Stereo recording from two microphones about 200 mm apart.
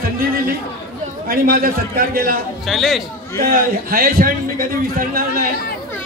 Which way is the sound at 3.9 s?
45° right (ahead or behind).